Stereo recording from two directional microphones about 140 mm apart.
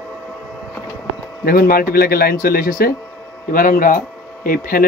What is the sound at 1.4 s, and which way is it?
Speech, 90° left.